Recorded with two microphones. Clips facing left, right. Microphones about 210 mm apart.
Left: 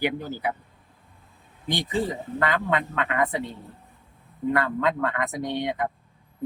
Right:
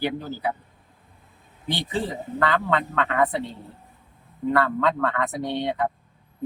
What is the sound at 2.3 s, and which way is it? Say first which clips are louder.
Speech: right 2 dB; 15° left (ahead or behind).